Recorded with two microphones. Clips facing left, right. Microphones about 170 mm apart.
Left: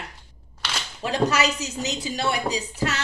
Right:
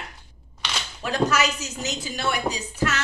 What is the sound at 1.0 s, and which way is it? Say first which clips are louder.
Speech: left 1 dB; 30° left (ahead or behind).